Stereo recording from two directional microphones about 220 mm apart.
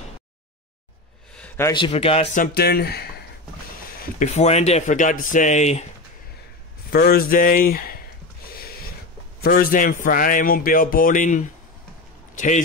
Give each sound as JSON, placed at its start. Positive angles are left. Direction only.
{"t": 1.3, "sound": "a sound", "side_deg": 5}
{"t": 1.7, "sound": "a man's voice", "side_deg": 25}
{"t": 4.0, "sound": "a man's voice", "side_deg": 30}
{"t": 6.9, "sound": "speech", "side_deg": 45}
{"t": 8.5, "sound": "a sound", "side_deg": 45}
{"t": 9.4, "sound": "a man's voice", "side_deg": 45}